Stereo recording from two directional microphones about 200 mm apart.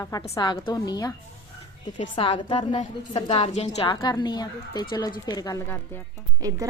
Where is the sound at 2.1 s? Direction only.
25° left (ahead or behind).